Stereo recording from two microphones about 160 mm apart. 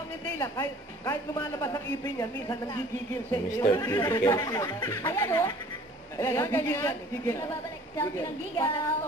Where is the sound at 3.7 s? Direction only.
20° left (ahead or behind).